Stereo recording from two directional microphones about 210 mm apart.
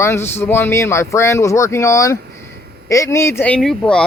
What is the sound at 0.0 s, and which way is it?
A man's voice, 10° left (ahead or behind).